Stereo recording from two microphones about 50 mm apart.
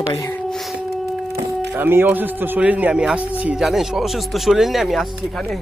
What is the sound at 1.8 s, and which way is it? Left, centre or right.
Speech, right.